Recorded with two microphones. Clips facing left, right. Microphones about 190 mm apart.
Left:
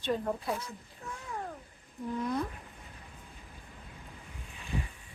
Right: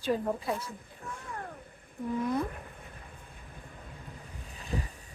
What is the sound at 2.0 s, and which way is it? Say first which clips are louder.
Speech: right 3 dB; 55° right (ahead or behind).